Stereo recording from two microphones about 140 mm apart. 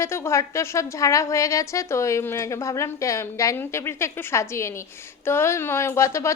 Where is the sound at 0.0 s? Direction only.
20° left (ahead or behind).